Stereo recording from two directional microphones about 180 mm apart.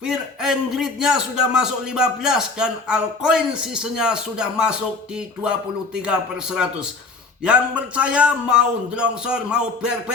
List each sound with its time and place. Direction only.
0.0 s a man's voice: 5° right (ahead or behind)